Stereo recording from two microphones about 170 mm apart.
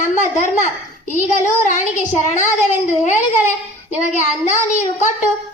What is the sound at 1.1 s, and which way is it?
A woman's voice, 45° left (ahead or behind).